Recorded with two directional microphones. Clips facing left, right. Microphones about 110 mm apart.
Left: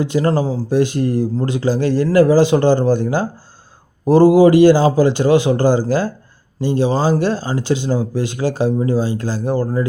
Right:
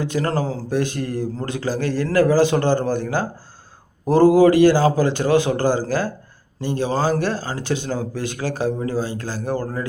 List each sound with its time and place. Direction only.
0.0 s speech: 20° left (ahead or behind)
0.7 s a man's voice: 20° left (ahead or behind)